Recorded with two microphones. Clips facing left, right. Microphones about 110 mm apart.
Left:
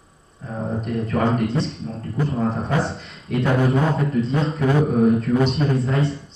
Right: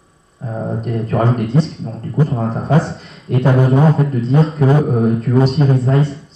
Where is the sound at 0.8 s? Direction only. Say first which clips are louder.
Right 4 dB; 30° right (ahead or behind).